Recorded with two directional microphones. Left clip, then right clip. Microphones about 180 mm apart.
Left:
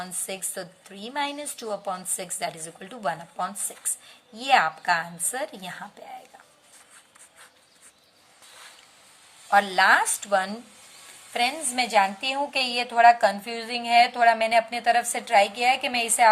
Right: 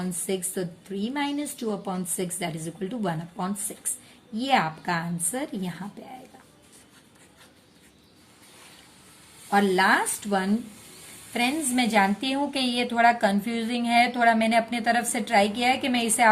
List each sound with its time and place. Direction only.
0.0 s a woman's voice: 25° left (ahead or behind)
9.5 s a woman's voice: 25° left (ahead or behind)